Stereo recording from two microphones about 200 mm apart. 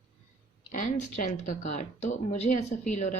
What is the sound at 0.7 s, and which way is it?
Speech, 40° left (ahead or behind).